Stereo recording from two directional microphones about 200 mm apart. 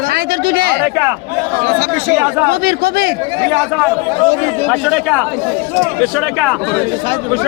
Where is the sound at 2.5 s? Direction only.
50° right (ahead or behind).